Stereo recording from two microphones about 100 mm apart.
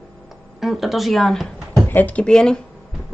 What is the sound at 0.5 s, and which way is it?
Speech, 5° right (ahead or behind).